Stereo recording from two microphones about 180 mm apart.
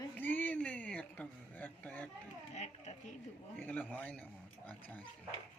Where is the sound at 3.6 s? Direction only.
10° left (ahead or behind).